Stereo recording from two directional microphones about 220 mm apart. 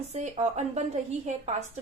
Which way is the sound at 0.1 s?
30° right (ahead or behind).